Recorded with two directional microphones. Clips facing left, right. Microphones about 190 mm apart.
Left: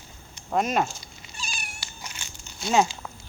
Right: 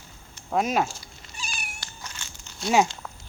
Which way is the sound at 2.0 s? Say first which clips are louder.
Left 1 dB; 15° left (ahead or behind).